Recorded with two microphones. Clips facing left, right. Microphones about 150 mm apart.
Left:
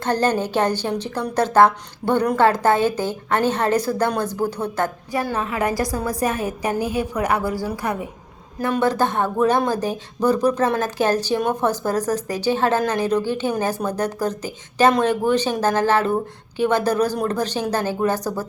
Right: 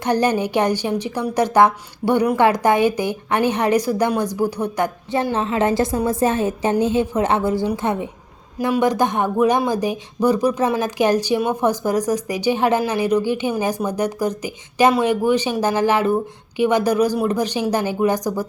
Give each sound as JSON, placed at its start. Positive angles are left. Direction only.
{"t": 0.0, "sound": "speech", "side_deg": -15}
{"t": 5.1, "sound": "a woman's voice", "side_deg": -25}
{"t": 8.5, "sound": "speech", "side_deg": -15}